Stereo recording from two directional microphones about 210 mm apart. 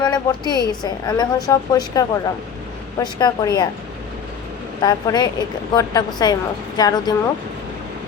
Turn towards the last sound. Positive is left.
turn(degrees=20)  # may be behind; listen again after turning